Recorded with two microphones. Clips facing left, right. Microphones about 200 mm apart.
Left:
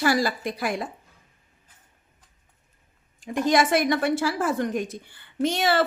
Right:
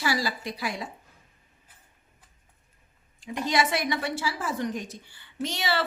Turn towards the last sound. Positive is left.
turn(degrees=50)  # may be behind; listen again after turning